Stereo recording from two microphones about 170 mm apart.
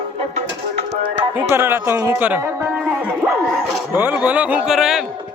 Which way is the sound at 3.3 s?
Centre (ahead or behind).